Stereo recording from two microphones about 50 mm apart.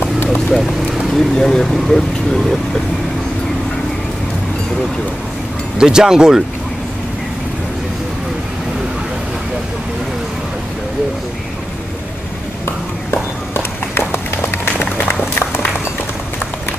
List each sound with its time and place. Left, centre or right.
0.5 s speech: centre
5.8 s speech: centre
13.6 s run: left
15.0 s applause: left